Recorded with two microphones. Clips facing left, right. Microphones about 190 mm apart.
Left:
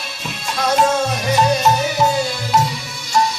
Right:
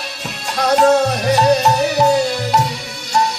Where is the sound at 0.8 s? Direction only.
40° right (ahead or behind).